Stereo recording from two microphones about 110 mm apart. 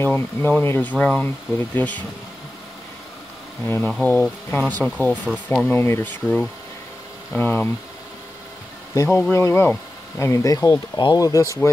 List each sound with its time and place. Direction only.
0.0 s speech: 15° left (ahead or behind)
3.8 s speech: 10° left (ahead or behind)
7.3 s speech: 20° left (ahead or behind)
8.9 s bee: 25° left (ahead or behind)
9.3 s speech: 25° left (ahead or behind)